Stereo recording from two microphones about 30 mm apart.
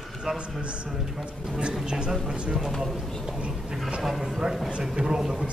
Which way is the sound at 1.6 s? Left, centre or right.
Right.